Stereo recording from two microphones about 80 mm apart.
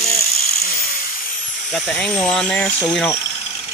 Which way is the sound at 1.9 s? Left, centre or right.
Centre.